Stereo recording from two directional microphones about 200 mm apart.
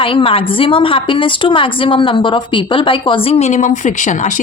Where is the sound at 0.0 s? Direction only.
25° left (ahead or behind).